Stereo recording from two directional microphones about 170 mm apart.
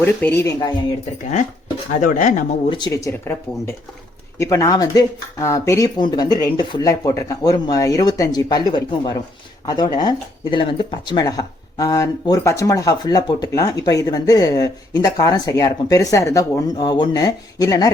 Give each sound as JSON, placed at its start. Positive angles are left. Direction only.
{"t": 0.0, "sound": "speech", "side_deg": 10}
{"t": 1.9, "sound": "speech", "side_deg": 50}
{"t": 2.6, "sound": "speech", "side_deg": 25}
{"t": 4.4, "sound": "speech", "side_deg": 20}